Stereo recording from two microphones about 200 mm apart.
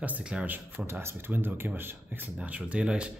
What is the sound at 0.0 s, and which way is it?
Speech, 5° right (ahead or behind).